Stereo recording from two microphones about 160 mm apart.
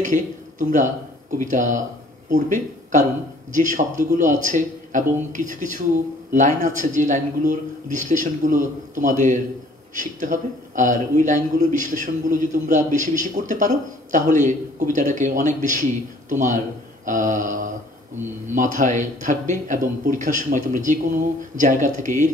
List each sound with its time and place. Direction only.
0.0 s a man's voice: 55° right (ahead or behind)
17.0 s a sound: 55° right (ahead or behind)
18.5 s a man's voice: 55° right (ahead or behind)